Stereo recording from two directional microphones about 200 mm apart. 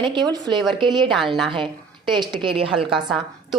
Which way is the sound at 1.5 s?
25° right (ahead or behind).